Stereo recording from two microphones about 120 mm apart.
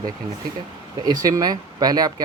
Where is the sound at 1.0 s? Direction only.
30° right (ahead or behind).